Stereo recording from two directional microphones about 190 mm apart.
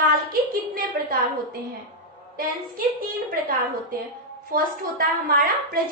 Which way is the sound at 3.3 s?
50° right (ahead or behind).